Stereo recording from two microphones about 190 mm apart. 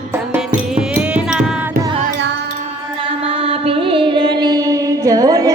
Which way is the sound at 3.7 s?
30° right (ahead or behind).